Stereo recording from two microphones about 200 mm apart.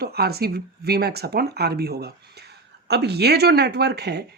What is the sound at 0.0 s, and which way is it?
Speech, 50° right (ahead or behind).